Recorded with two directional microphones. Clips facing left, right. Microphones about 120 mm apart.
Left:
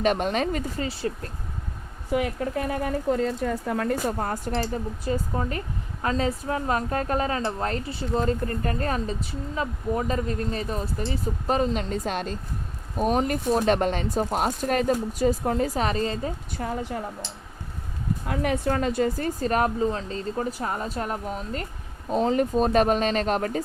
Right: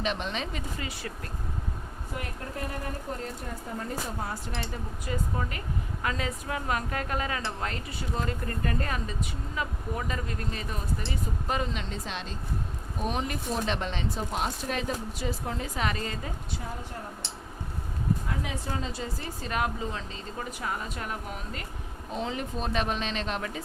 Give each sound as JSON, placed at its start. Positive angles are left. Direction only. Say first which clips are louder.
{"t": 0.0, "sound": "speech", "louder": "left 8 dB", "side_deg": 50}
{"t": 0.8, "sound": "a woman's voice", "louder": "left 8 dB", "side_deg": 30}
{"t": 2.1, "sound": "speech", "louder": "left 12 dB", "side_deg": 85}
{"t": 4.2, "sound": "speech", "louder": "left 8 dB", "side_deg": 50}
{"t": 5.0, "sound": "a woman's voice", "louder": "left 4 dB", "side_deg": 30}
{"t": 16.6, "sound": "a woman's voice", "louder": "left 9 dB", "side_deg": 75}
{"t": 18.3, "sound": "a woman's voice", "louder": "left 9 dB", "side_deg": 60}